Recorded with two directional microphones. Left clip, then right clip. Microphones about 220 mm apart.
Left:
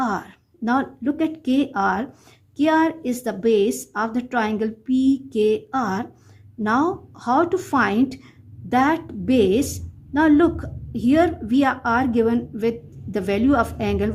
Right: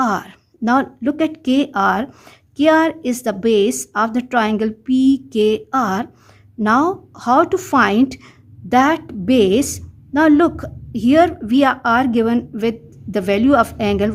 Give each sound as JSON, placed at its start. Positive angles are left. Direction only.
{"t": 0.0, "sound": "a woman's voice", "side_deg": -30}